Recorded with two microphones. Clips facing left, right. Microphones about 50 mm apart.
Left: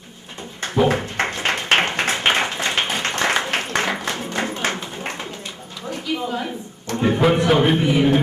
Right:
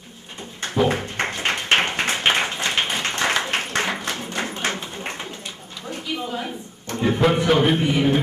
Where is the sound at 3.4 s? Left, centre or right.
Centre.